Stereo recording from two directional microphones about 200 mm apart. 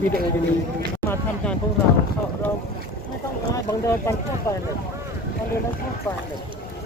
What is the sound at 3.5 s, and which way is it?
Speech, 15° left (ahead or behind).